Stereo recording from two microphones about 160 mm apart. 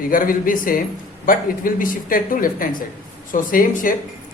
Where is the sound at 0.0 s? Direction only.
60° left (ahead or behind).